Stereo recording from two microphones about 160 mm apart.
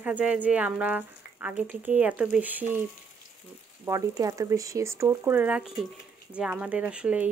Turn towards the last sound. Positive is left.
turn(degrees=-10)  # may be behind; listen again after turning